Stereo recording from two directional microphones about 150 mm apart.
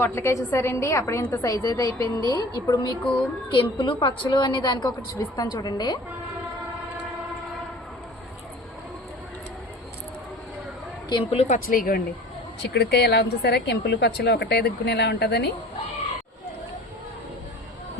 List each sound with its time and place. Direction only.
0.0 s a woman's voice: 15° left (ahead or behind)
3.0 s a woman's voice: 5° left (ahead or behind)
3.5 s a woman's voice: 35° left (ahead or behind)
11.1 s speech: 40° left (ahead or behind); by 12.0 s 70° left (ahead or behind)
12.7 s a woman's voice: 90° left